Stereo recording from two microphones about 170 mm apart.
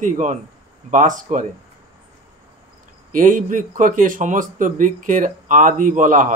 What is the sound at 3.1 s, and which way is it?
Speech, 50° right (ahead or behind).